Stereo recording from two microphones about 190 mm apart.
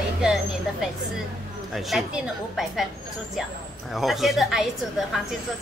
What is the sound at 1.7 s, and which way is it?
A woman's voice, centre (ahead or behind).